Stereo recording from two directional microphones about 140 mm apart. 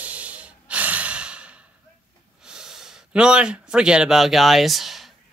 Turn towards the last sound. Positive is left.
turn(degrees=0)  # may be behind; listen again after turning